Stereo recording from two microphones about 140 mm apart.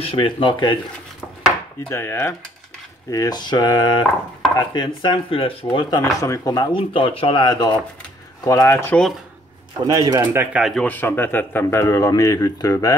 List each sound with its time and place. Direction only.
0.0 s speech: 35° left (ahead or behind)
1.9 s speech: 15° left (ahead or behind)
6.7 s speech: 40° left (ahead or behind)
8.5 s speech: 20° left (ahead or behind)
9.8 s speech: 30° right (ahead or behind)
10.2 s speech: 15° right (ahead or behind)
10.6 s speech: 5° left (ahead or behind); by 12.9 s 25° left (ahead or behind)